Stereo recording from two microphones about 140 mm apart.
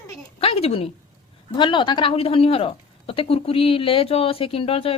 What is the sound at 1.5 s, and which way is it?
Speech, 35° left (ahead or behind).